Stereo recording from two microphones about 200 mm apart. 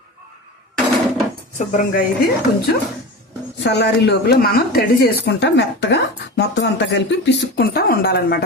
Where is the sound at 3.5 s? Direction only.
60° left (ahead or behind).